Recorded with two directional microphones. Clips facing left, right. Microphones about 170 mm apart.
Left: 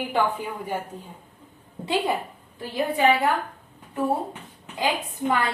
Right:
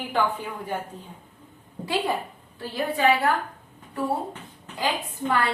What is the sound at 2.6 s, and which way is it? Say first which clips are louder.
Speech: left 2 dB; 15° left (ahead or behind).